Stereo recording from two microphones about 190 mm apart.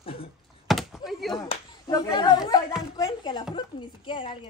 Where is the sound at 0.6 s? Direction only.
Centre (ahead or behind).